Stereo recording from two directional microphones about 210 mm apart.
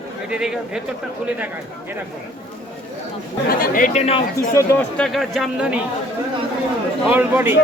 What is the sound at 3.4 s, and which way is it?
Speech, 45° left (ahead or behind).